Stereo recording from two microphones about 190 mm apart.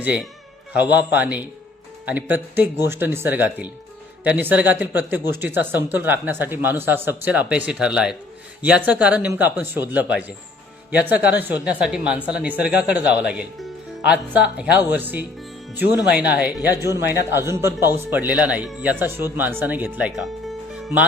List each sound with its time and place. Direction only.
0.0 s speech: 5° right (ahead or behind)